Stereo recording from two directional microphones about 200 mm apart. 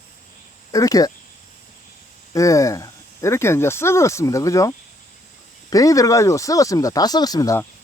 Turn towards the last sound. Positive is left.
turn(degrees=15)  # may be behind; listen again after turning